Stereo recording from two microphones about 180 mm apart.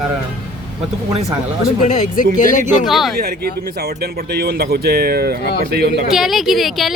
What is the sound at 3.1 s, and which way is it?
Speech, 55° right (ahead or behind).